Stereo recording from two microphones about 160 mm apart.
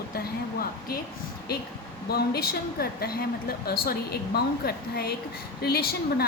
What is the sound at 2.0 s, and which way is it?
A woman's voice, 80° left.